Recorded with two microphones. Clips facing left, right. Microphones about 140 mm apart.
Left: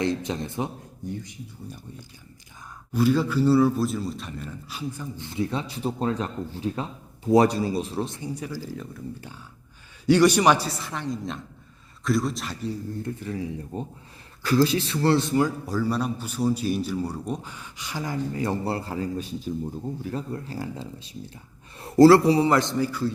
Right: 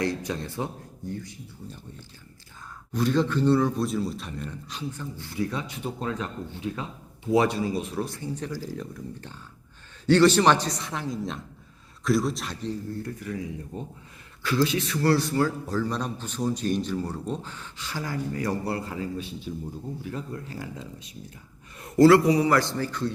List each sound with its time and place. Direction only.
0.0 s a man's voice: 20° left (ahead or behind); by 12.7 s centre (ahead or behind)
13.0 s a man's voice: 30° left (ahead or behind); by 23.1 s 5° left (ahead or behind)